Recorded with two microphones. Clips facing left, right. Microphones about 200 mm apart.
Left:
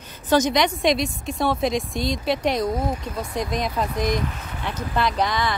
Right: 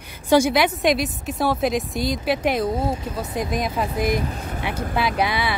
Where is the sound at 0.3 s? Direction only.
10° right (ahead or behind).